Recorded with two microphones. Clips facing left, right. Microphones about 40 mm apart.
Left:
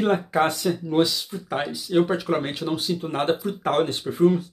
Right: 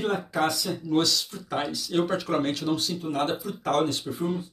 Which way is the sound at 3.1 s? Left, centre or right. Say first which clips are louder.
Left 4 dB; left.